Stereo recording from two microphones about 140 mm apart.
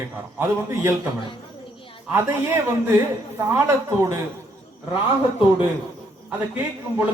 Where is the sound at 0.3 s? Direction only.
20° right (ahead or behind).